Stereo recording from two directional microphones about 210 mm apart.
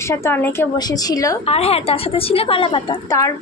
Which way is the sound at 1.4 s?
30° left (ahead or behind).